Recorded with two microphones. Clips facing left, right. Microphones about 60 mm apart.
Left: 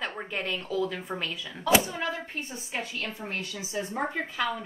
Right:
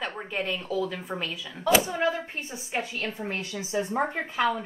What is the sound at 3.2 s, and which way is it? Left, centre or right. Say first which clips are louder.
A woman's voice: right 2 dB; right.